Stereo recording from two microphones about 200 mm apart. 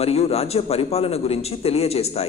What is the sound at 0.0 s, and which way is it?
A man's voice, 30° left (ahead or behind).